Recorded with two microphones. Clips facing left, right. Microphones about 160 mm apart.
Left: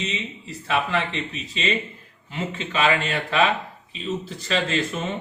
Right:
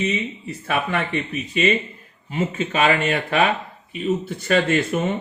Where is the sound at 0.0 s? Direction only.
55° right (ahead or behind).